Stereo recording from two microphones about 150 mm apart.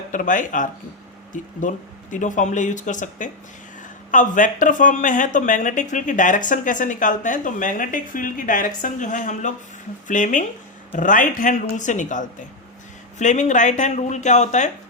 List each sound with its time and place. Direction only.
0.1 s speech: 60° left (ahead or behind)